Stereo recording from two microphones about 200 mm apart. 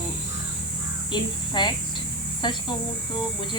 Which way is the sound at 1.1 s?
20° left (ahead or behind).